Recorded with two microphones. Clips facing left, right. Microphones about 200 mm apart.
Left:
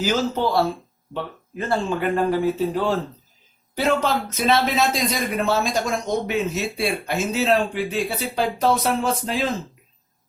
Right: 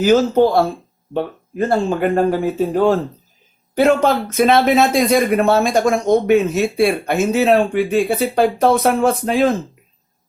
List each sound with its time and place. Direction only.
0.0 s speech: 50° right (ahead or behind)